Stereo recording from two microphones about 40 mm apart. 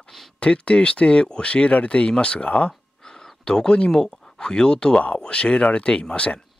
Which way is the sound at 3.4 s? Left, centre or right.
Centre.